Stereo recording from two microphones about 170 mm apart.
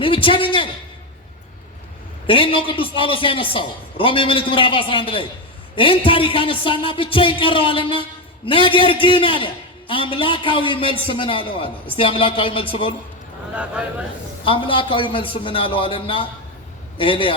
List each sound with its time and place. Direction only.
0.0 s a man's voice: 30° left (ahead or behind)
2.2 s a man's voice: 30° left (ahead or behind)
14.4 s a man's voice: 30° left (ahead or behind)